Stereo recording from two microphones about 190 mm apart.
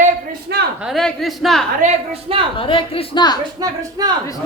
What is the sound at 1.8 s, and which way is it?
Speech, 30° right (ahead or behind).